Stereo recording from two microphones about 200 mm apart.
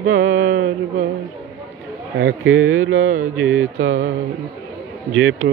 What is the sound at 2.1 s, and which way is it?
Speech, 90° right.